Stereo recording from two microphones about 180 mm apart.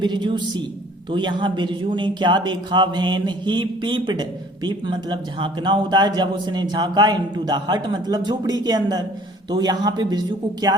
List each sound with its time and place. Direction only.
0.0 s speech: 25° right (ahead or behind)